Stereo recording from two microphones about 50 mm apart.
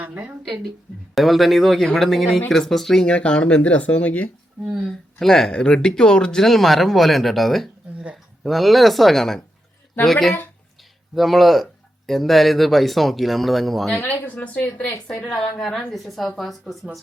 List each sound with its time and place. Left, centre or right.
0.0 s speech: right
1.1 s speech: centre
3.1 s speech: centre
4.9 s speech: centre
6.4 s speech: centre
14.3 s speech: left
15.1 s speech: centre